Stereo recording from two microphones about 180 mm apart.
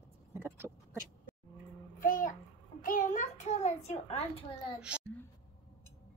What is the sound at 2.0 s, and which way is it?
Child singing, 50° left (ahead or behind).